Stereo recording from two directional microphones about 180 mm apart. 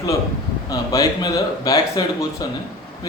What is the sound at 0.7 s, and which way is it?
A man's voice, 20° left (ahead or behind).